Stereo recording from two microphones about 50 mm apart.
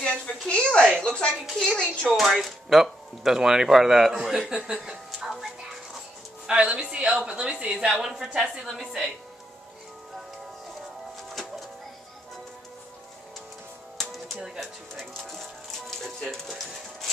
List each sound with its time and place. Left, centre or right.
0.0 s a woman's voice: centre
0.8 s a sound: centre
2.0 s speech: centre
4.6 s music: centre
6.4 s a woman's voice: centre
8.0 s speech: centre
13.9 s music: centre
14.6 s speech: centre